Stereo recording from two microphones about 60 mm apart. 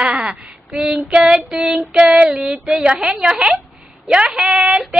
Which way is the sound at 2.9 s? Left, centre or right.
Centre.